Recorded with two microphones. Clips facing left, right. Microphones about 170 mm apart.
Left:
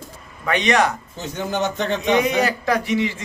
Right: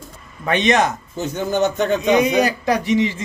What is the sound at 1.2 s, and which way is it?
Speech, 45° right (ahead or behind).